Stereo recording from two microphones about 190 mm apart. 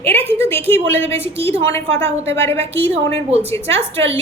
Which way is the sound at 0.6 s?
30° right (ahead or behind).